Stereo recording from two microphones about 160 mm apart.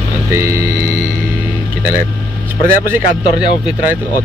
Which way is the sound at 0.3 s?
15° right (ahead or behind).